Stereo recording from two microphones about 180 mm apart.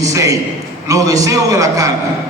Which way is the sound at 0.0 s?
20° right (ahead or behind).